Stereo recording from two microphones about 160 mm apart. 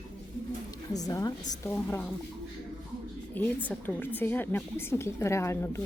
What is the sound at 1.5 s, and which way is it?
Speech, 15° left (ahead or behind).